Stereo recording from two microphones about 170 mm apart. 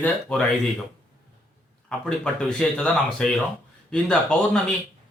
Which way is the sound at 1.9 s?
5° left (ahead or behind).